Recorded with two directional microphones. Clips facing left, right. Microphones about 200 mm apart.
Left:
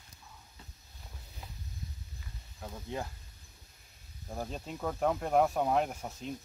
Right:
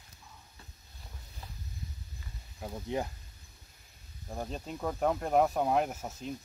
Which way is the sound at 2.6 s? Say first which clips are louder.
Right 4 dB; 20° right (ahead or behind).